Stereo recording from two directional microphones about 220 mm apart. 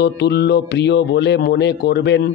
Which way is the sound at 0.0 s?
50° left (ahead or behind).